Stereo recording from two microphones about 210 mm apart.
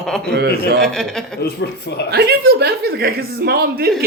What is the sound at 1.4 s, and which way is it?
Speech, 50° left (ahead or behind).